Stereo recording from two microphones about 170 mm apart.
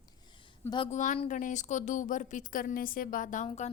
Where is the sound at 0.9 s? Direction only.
45° left (ahead or behind).